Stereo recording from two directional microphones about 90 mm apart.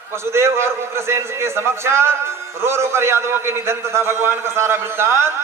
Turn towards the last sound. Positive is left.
turn(degrees=-30)  # may be behind; listen again after turning